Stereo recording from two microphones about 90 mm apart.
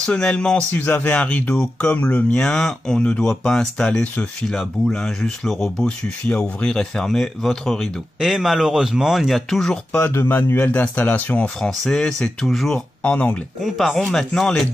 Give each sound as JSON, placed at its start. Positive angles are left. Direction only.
{"t": 0.0, "sound": "speech", "side_deg": 10}
{"t": 10.1, "sound": "speech", "side_deg": 25}
{"t": 11.8, "sound": "speech", "side_deg": 5}
{"t": 13.6, "sound": "speech", "side_deg": 0}